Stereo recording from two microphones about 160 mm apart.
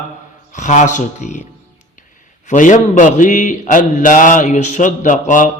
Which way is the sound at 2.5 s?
50° left (ahead or behind).